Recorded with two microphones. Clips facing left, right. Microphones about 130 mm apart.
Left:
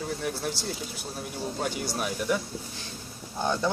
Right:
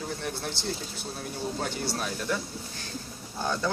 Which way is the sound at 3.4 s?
15° left (ahead or behind).